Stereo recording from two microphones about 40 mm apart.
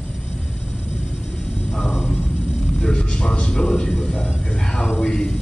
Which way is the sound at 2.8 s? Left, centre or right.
Left.